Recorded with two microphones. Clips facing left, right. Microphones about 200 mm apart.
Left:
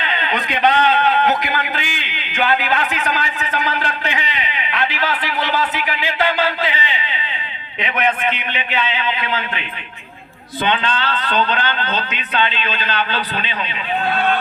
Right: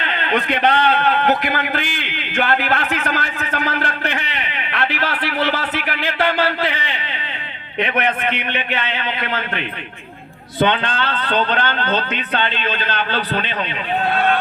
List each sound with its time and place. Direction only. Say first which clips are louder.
0.0 s a man's voice: right 2 dB; 60° right (ahead or behind)
8.3 s speech: right 1 dB; 60° right (ahead or behind)